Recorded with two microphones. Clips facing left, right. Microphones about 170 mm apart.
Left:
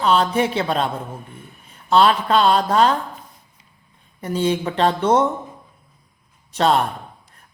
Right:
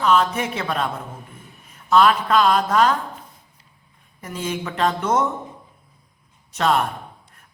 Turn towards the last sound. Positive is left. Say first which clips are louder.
# left 2 dB
turn(degrees=30)  # may be behind; listen again after turning